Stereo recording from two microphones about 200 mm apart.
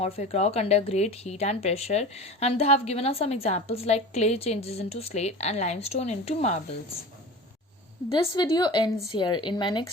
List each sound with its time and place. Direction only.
0.0 s a woman's voice: 30° left (ahead or behind)
8.2 s a woman's voice: 20° left (ahead or behind)